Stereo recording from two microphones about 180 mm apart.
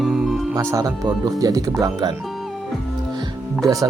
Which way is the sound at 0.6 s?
20° right (ahead or behind).